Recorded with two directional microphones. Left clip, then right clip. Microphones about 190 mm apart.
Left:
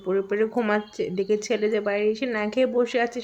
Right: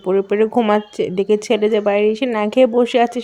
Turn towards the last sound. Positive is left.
turn(degrees=-30)  # may be behind; listen again after turning